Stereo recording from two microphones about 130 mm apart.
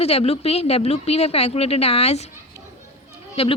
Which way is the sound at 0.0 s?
50° left (ahead or behind).